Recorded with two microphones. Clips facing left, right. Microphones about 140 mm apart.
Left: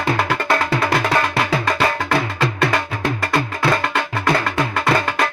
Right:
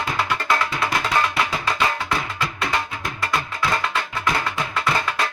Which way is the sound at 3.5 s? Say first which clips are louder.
Left 5 dB; 55° left (ahead or behind).